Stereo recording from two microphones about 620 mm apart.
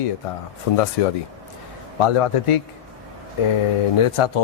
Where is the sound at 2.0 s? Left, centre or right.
Left.